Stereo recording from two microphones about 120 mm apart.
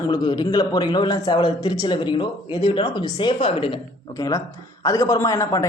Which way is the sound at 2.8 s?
30° left (ahead or behind).